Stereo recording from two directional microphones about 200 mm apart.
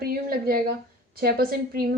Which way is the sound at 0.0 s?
50° right (ahead or behind).